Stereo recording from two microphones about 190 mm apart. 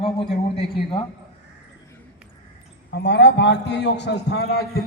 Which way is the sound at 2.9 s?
60° left (ahead or behind).